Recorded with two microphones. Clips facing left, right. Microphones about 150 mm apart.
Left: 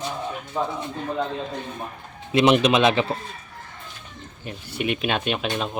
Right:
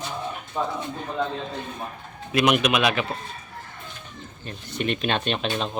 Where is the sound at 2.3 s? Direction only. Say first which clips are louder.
Left 3 dB; 25° left (ahead or behind).